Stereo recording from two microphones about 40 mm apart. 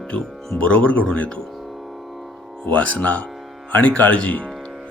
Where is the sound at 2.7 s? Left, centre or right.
Left.